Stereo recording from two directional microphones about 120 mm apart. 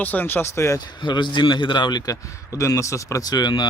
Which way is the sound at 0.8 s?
40° left (ahead or behind).